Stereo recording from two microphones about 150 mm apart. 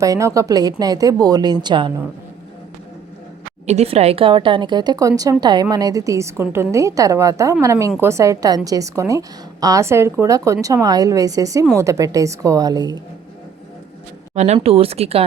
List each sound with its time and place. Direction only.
0.0 s a woman's voice: 20° right (ahead or behind)
3.7 s a woman's voice: 45° right (ahead or behind); by 13.0 s 25° right (ahead or behind)
14.3 s speech: 50° right (ahead or behind)